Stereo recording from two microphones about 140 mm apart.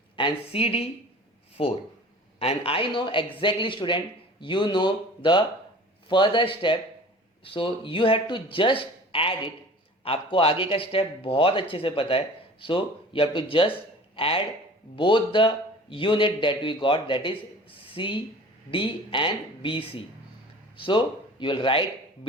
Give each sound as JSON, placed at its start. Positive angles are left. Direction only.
{"t": 0.2, "sound": "speech", "side_deg": 40}